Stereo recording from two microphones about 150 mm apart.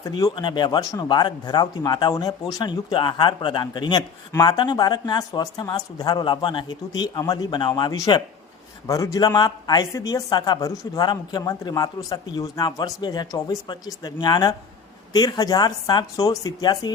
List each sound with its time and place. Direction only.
0.0 s speech: 25° left (ahead or behind)